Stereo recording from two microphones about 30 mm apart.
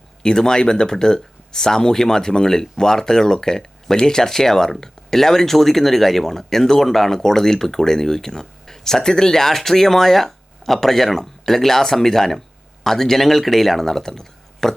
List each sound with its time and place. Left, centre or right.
0.2 s speech: left